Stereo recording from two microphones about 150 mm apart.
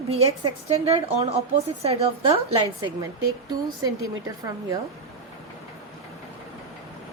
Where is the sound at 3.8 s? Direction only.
20° right (ahead or behind).